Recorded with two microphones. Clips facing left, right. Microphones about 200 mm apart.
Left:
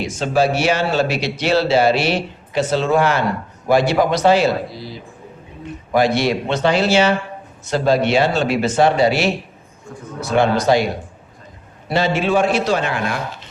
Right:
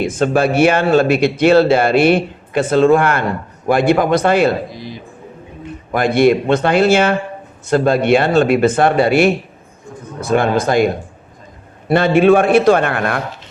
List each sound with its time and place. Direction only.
0.0 s speech: 55° right (ahead or behind)
4.7 s speech: 20° right (ahead or behind)
5.9 s speech: 55° right (ahead or behind)